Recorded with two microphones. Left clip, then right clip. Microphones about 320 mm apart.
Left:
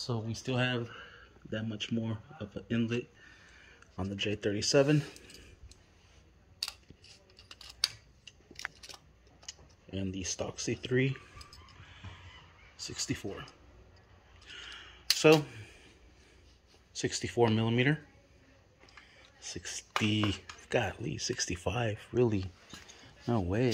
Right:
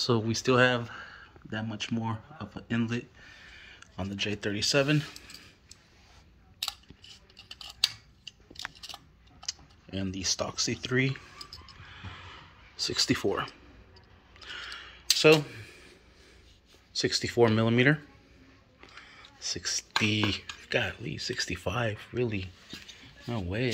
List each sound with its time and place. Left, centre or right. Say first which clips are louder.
0.0 s speech: right 10 dB; right
0.4 s speech: right 9 dB; centre
3.4 s a sound: right 7 dB; centre
9.5 s computer keyboard: right 7 dB; centre
12.8 s speech: right 11 dB; centre
14.4 s a sound: right 6 dB; centre
17.0 s speech: right 5 dB; centre
19.0 s a sound: right 10 dB; centre
20.6 s speech: right 1 dB; centre
22.2 s speech: left 2 dB; left